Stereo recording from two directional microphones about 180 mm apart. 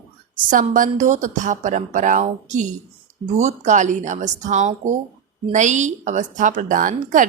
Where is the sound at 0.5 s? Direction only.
50° right (ahead or behind).